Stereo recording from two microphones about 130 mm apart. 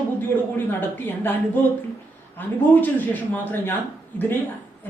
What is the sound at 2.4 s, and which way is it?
A woman's voice, 15° left (ahead or behind).